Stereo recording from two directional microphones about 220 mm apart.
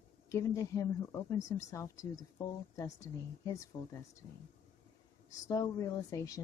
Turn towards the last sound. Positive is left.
turn(degrees=15)  # may be behind; listen again after turning